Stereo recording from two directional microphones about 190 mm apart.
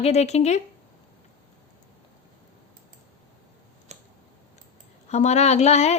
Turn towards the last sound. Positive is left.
turn(degrees=35)  # may be behind; listen again after turning